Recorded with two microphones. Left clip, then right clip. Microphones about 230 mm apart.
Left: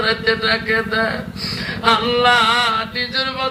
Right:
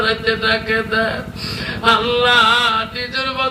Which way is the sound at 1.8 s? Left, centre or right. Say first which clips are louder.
Even; centre.